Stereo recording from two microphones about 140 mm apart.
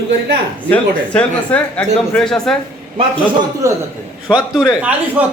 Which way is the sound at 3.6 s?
25° right (ahead or behind).